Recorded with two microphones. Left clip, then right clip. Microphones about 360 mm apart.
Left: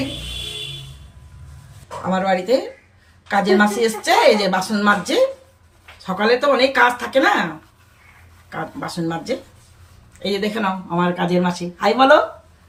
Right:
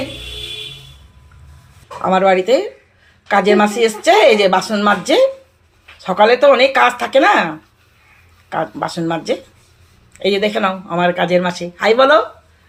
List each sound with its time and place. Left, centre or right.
2.0 s speech: centre
8.5 s speech: centre